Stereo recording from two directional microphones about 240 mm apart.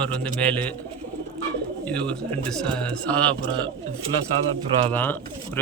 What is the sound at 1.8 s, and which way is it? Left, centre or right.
Speech, centre.